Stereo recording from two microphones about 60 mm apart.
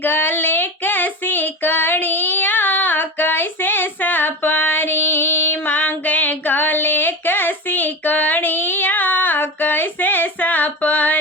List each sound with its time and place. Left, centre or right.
0.0 s female singing: left